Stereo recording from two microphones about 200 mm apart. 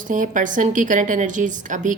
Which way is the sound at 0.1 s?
40° right (ahead or behind).